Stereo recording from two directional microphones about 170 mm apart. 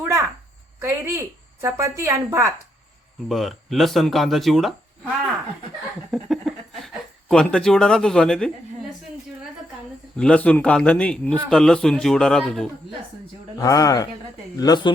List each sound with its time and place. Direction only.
0.0 s cricket: 15° right (ahead or behind)
0.8 s a woman's voice: 15° right (ahead or behind)
3.2 s speech: centre (ahead or behind)
6.1 s a sound: centre (ahead or behind)
10.2 s a man's voice: 5° left (ahead or behind)
13.6 s a man's voice: 20° left (ahead or behind)